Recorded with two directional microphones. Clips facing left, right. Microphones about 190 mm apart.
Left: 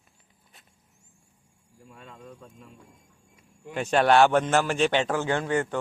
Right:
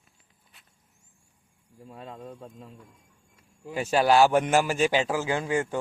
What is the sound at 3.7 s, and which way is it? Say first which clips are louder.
A man's voice: left 1 dB; 5° right (ahead or behind).